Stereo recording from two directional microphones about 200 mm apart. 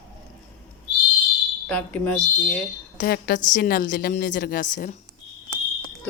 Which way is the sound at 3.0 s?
50° left (ahead or behind).